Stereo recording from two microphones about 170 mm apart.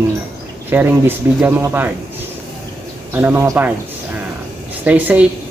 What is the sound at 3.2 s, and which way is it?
Speech, 15° right (ahead or behind).